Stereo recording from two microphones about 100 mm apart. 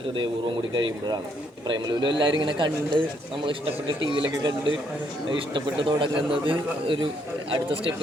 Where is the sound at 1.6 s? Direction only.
50° right (ahead or behind).